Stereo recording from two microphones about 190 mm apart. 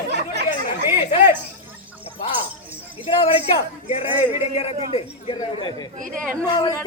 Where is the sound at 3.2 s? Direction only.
30° left (ahead or behind).